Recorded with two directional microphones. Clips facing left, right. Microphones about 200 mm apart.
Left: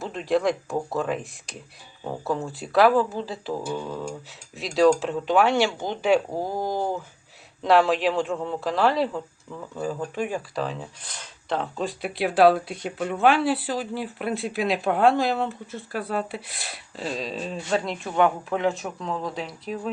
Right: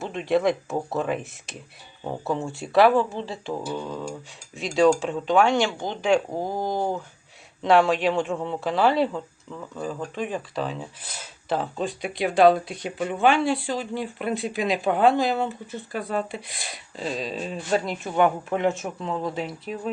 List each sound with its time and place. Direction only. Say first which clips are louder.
0.0 s speech: right 1 dB; centre (ahead or behind)
6.7 s speech: right 2 dB; 15° right (ahead or behind)
7.6 s speech: even; centre (ahead or behind)